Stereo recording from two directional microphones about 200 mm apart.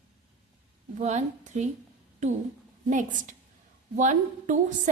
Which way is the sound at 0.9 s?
35° right (ahead or behind).